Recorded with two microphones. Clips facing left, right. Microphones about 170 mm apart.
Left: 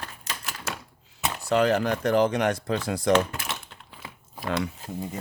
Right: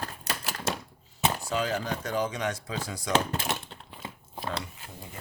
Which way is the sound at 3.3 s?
25° right (ahead or behind).